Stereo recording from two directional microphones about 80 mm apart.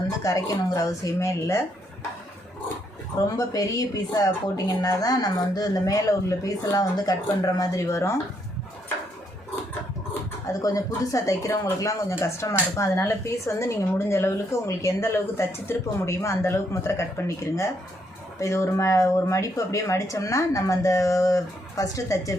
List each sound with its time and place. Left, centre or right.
0.2 s speech: left
3.2 s speech: left
7.9 s speech: left
10.4 s speech: left